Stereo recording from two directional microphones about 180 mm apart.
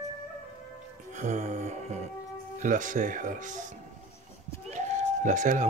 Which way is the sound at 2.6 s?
45° right (ahead or behind).